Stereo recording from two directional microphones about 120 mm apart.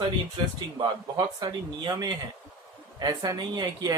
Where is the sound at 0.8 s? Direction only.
35° right (ahead or behind).